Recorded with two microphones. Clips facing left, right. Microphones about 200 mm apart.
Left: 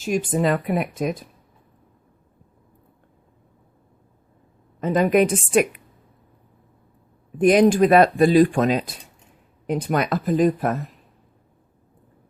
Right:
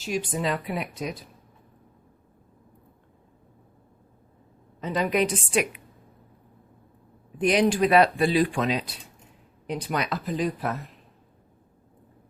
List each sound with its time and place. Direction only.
0.0 s speech: 50° left (ahead or behind)
4.8 s speech: 50° left (ahead or behind)
7.3 s speech: 45° left (ahead or behind)